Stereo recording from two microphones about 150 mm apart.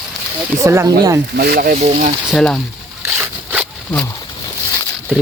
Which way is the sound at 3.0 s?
15° right (ahead or behind).